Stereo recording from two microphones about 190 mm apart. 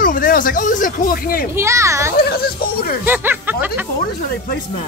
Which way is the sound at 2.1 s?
55° left (ahead or behind).